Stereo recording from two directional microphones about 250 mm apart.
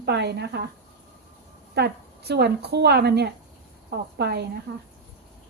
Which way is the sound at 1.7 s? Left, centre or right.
Right.